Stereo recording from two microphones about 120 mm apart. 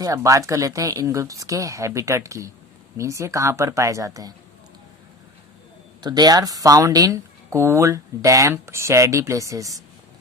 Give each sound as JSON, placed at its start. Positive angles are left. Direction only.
{"t": 0.0, "sound": "speech", "side_deg": -30}
{"t": 6.0, "sound": "speech", "side_deg": -35}